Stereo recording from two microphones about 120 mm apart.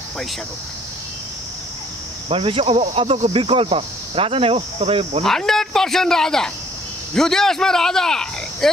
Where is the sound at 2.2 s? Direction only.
50° right (ahead or behind).